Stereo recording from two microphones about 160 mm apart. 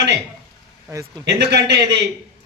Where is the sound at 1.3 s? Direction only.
90° right.